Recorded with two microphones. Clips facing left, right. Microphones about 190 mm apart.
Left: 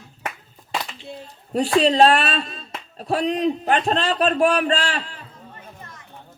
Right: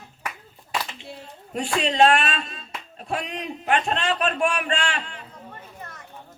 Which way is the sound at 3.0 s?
35° left (ahead or behind).